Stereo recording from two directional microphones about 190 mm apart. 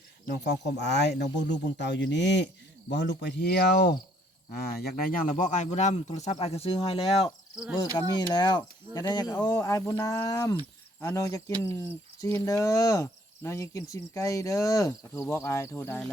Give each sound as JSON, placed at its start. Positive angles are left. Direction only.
{"t": 0.3, "sound": "speech", "side_deg": 65}
{"t": 5.3, "sound": "speech", "side_deg": 40}
{"t": 7.5, "sound": "cricket", "side_deg": -5}
{"t": 8.3, "sound": "speech", "side_deg": 20}